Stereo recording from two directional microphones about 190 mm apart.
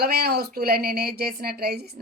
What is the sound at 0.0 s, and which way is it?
Speech, 55° right (ahead or behind).